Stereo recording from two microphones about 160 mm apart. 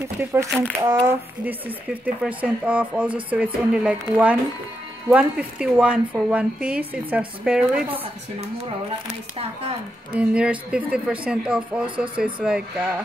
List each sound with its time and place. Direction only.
0.2 s speech: 15° right (ahead or behind)
2.0 s speech: 10° right (ahead or behind)
10.1 s speech: 5° right (ahead or behind)